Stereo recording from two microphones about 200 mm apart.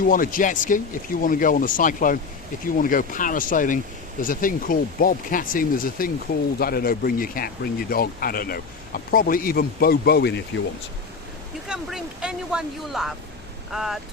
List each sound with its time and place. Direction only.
0.1 s speech: 45° left (ahead or behind)
11.7 s speech: 5° right (ahead or behind)